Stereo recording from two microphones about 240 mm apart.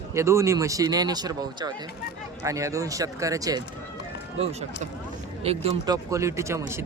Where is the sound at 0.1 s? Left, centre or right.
Centre.